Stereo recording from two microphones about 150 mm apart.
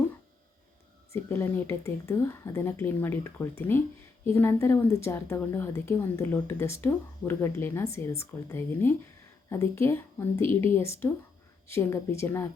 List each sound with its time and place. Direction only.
1.1 s a woman's voice: 15° left (ahead or behind)